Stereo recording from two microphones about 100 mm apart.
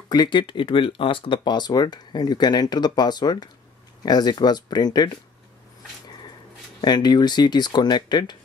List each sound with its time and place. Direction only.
0.1 s speech: 50° left (ahead or behind)
6.8 s speech: 45° left (ahead or behind)